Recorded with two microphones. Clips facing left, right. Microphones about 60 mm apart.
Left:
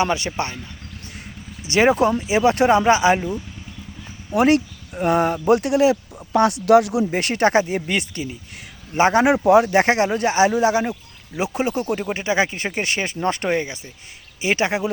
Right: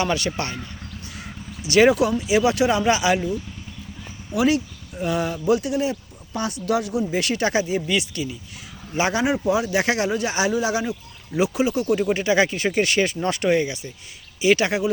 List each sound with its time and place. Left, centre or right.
0.0 s speech: left
1.6 s speech: left
4.3 s speech: left
7.1 s speech: left
9.2 s speech: left
11.9 s speech: left